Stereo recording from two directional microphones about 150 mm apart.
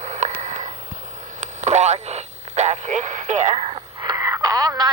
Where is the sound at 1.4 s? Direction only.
50° right (ahead or behind).